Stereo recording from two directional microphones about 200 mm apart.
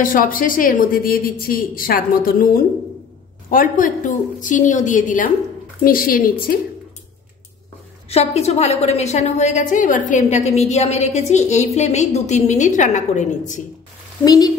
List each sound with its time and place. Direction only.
0.0 s a woman's voice: 45° left (ahead or behind)
8.1 s a woman's voice: 30° left (ahead or behind)
14.2 s speech: 20° left (ahead or behind)